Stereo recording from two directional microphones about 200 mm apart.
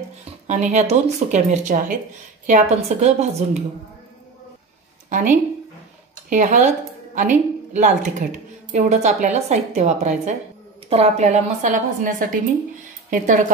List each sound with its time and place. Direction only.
0.5 s a woman's voice: 35° right (ahead or behind)
5.1 s a woman's voice: 40° right (ahead or behind)